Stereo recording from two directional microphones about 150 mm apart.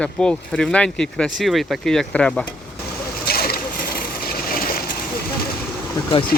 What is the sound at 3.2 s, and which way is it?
Vehicle, 90° left.